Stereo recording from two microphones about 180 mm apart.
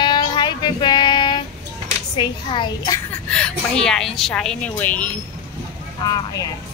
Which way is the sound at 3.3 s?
5° left (ahead or behind).